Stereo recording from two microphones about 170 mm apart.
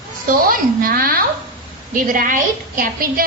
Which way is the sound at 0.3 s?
55° right (ahead or behind).